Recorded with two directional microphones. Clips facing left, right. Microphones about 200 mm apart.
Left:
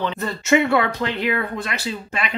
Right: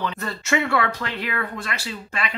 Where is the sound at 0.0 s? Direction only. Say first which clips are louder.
Left 3 dB; 20° left (ahead or behind).